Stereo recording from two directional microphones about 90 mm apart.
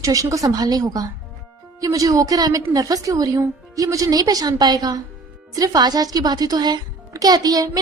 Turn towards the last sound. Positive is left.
turn(degrees=-45)  # may be behind; listen again after turning